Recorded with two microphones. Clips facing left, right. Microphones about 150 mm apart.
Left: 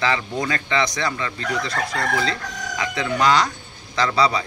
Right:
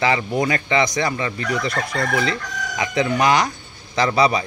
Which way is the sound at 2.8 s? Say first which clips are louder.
Right 2 dB; 20° right (ahead or behind).